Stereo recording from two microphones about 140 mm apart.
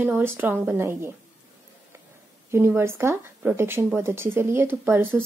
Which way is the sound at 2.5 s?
15° right (ahead or behind).